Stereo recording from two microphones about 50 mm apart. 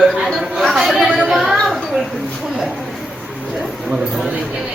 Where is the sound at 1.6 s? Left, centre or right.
Centre.